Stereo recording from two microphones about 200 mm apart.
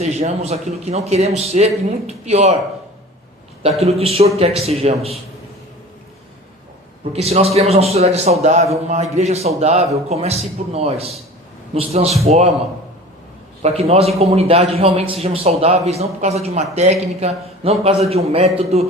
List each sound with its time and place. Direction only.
0.0 s a man's voice: 30° right (ahead or behind)
3.6 s a man's voice: 30° right (ahead or behind)
7.1 s a man's voice: 30° right (ahead or behind)
13.6 s a man's voice: 30° right (ahead or behind)